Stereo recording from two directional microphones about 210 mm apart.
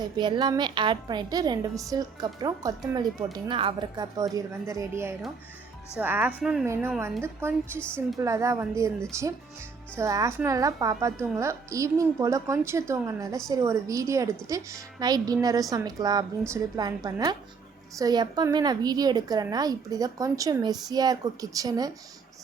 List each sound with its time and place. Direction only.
0.2 s a woman's voice: 20° right (ahead or behind)
7.8 s a woman's voice: 5° left (ahead or behind)
8.2 s a woman's voice: 15° right (ahead or behind)